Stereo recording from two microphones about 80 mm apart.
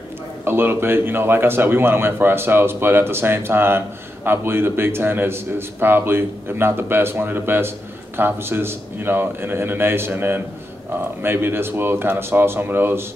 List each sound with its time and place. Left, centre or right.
0.5 s a man's voice: right